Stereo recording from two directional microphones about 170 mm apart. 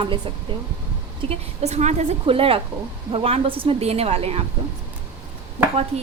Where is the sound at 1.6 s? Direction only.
40° right (ahead or behind).